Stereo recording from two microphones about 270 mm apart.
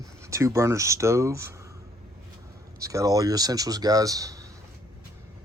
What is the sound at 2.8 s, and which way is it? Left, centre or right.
Speech, centre.